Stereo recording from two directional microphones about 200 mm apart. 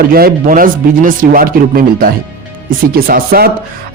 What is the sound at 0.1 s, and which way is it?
A man's voice, 45° right (ahead or behind).